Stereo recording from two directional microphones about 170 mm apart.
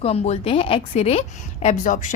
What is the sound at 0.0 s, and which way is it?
Speech, 40° left (ahead or behind).